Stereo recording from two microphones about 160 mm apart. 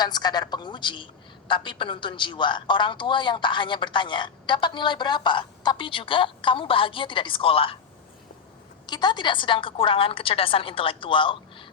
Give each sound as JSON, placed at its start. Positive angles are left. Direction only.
{"t": 0.0, "sound": "a woman's voice", "side_deg": 25}
{"t": 8.9, "sound": "a man's voice", "side_deg": 25}